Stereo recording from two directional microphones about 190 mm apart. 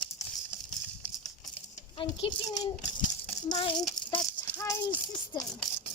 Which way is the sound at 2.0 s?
25° left (ahead or behind).